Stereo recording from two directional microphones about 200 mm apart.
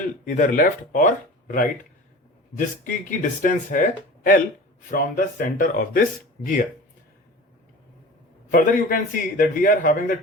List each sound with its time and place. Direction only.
0.3 s speech: 40° left (ahead or behind)
8.4 s speech: 45° left (ahead or behind)